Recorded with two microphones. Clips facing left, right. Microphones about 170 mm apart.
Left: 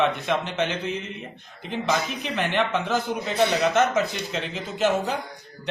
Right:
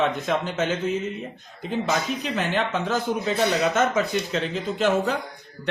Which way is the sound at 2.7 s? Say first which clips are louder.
Right 1 dB; 45° right (ahead or behind).